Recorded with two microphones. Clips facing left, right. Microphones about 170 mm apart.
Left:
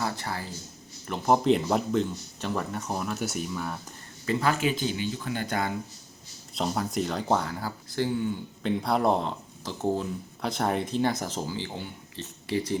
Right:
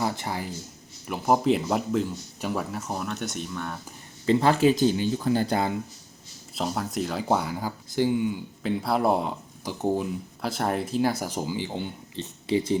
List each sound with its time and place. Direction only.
0.0 s speech: 20° right (ahead or behind)
1.0 s speech: 5° right (ahead or behind)
4.3 s speech: 25° right (ahead or behind)
6.6 s speech: centre (ahead or behind)
10.4 s speech: centre (ahead or behind); by 12.8 s 20° right (ahead or behind)